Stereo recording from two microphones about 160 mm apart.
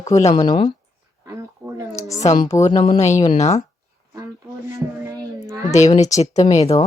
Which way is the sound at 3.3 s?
45° left (ahead or behind).